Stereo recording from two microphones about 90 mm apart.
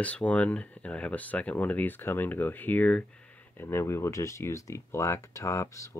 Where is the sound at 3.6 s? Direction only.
25° left (ahead or behind).